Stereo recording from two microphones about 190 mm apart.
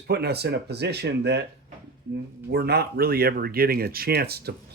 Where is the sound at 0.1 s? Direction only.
60° right (ahead or behind).